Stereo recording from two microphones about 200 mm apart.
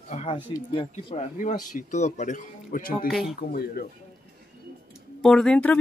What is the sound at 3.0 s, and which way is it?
Speech, centre (ahead or behind).